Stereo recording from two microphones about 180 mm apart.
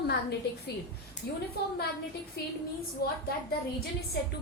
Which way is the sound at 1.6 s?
60° left (ahead or behind).